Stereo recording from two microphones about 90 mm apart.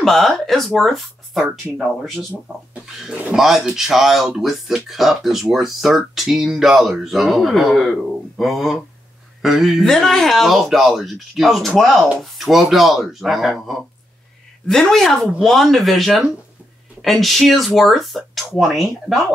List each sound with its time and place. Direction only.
0.0 s speech: 5° left (ahead or behind)
2.7 s a sound: 15° right (ahead or behind)
3.3 s speech: 5° right (ahead or behind)